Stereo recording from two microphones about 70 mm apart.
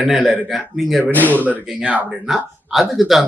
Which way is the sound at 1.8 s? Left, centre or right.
Centre.